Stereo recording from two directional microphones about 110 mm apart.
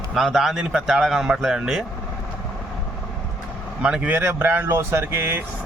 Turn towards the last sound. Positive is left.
turn(degrees=-20)  # may be behind; listen again after turning